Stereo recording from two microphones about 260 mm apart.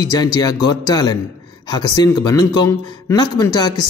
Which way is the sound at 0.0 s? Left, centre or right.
Centre.